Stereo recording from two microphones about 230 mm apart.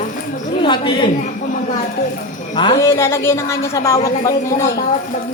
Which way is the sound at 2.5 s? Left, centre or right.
Centre.